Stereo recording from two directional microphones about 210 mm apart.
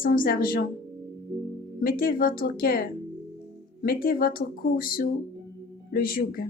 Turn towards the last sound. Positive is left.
turn(degrees=45)  # may be behind; listen again after turning